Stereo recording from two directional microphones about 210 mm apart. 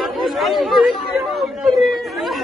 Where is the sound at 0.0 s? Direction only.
Centre (ahead or behind).